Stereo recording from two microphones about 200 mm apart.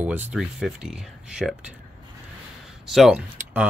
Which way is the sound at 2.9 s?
Centre (ahead or behind).